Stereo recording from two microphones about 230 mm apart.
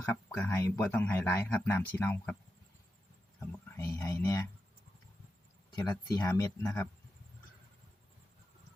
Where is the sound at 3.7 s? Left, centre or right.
Centre.